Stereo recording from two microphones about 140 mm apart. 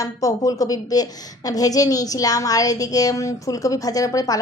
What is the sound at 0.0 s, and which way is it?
A woman's voice, 25° left (ahead or behind).